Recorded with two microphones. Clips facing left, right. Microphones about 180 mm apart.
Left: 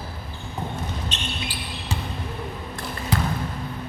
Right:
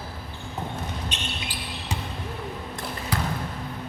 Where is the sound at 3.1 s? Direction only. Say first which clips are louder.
Left 4 dB; 20° left (ahead or behind).